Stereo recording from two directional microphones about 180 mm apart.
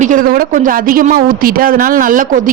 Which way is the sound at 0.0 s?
45° right (ahead or behind).